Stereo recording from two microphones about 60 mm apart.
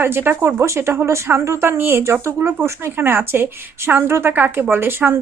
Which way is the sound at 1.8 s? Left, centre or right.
Right.